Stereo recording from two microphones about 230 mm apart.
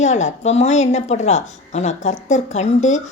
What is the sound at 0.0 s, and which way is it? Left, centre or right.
Speech, left.